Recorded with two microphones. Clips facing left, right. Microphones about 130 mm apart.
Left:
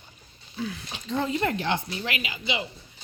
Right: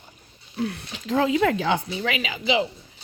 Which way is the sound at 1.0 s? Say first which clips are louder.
Right 6 dB; 90° right.